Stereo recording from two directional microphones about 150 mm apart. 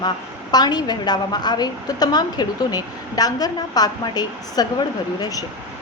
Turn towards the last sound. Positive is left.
turn(degrees=25)  # may be behind; listen again after turning